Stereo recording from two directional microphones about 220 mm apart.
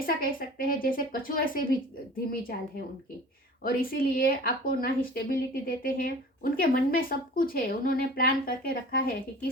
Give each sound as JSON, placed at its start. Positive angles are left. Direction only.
{"t": 0.0, "sound": "speech", "side_deg": 40}